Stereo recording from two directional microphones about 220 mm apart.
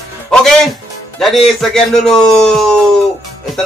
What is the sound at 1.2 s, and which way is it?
Speech, centre (ahead or behind).